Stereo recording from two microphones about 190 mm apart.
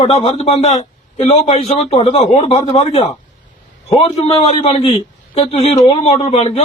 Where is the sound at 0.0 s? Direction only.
30° left (ahead or behind).